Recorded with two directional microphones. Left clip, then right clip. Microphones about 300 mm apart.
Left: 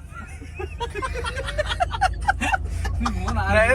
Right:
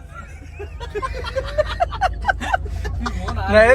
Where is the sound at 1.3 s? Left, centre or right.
Right.